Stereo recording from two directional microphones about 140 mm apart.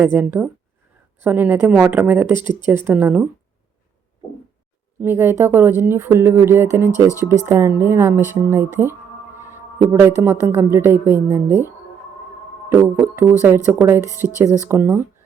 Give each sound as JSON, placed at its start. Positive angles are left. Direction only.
{"t": 0.0, "sound": "speech", "side_deg": -15}
{"t": 4.9, "sound": "speech", "side_deg": -15}
{"t": 9.4, "sound": "a sound", "side_deg": -15}
{"t": 10.2, "sound": "speech", "side_deg": -20}
{"t": 12.8, "sound": "speech", "side_deg": -15}